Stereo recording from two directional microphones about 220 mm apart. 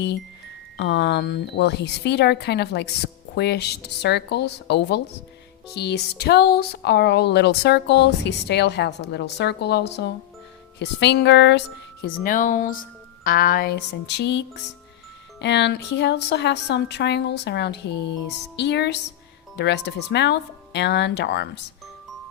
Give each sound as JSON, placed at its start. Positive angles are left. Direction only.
{"t": 0.8, "sound": "speech", "side_deg": 50}
{"t": 12.0, "sound": "speech", "side_deg": 40}